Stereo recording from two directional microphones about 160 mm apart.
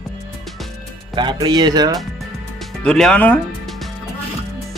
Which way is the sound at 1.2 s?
30° right (ahead or behind).